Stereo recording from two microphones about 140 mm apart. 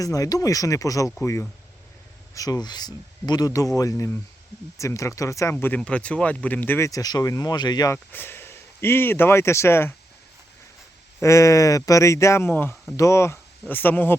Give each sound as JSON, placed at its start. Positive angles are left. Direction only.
{"t": 0.0, "sound": "speech", "side_deg": 25}
{"t": 7.9, "sound": "speech", "side_deg": 15}
{"t": 11.2, "sound": "speech", "side_deg": 20}